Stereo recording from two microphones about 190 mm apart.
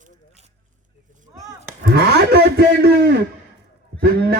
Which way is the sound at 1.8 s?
55° right (ahead or behind).